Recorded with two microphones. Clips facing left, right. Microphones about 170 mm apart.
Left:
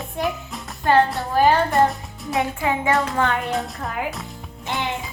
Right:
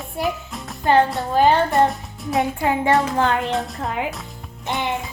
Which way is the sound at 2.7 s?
35° right (ahead or behind).